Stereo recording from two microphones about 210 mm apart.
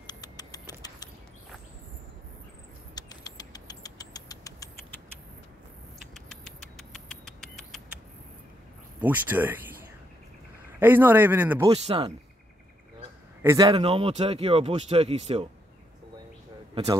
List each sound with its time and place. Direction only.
0.0 s vehicle: 20° left (ahead or behind)
2.9 s vehicle: 20° left (ahead or behind)
6.1 s rodents: centre (ahead or behind)
9.0 s speech: 10° right (ahead or behind)
10.8 s a man's voice: 10° right (ahead or behind)
11.7 s speech: 25° right (ahead or behind)
13.4 s speech: 15° right (ahead or behind)